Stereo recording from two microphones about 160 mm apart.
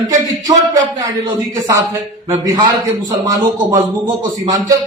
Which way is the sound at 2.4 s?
25° right (ahead or behind).